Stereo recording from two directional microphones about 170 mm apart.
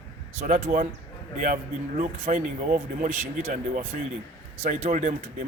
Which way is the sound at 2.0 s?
45° right (ahead or behind).